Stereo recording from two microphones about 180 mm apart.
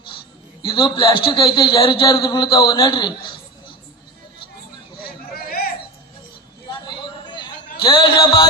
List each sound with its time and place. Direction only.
0.6 s a man's voice: 25° left (ahead or behind)
5.0 s hubbub: 55° left (ahead or behind)
6.7 s a sound: 25° left (ahead or behind)